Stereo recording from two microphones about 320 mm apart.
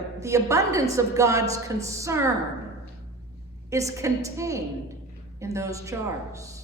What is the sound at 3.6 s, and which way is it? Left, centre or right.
A woman's voice, centre.